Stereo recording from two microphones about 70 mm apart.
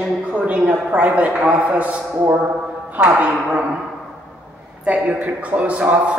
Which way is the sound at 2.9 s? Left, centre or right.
Centre.